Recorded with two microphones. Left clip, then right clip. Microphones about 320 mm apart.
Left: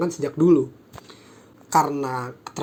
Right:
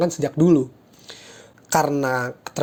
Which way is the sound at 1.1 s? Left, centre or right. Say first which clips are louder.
Right 6 dB; right.